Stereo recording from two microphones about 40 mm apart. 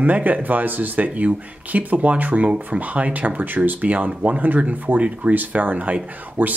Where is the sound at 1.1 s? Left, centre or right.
Right.